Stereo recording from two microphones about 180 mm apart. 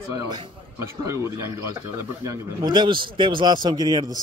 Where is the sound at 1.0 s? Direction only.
15° right (ahead or behind).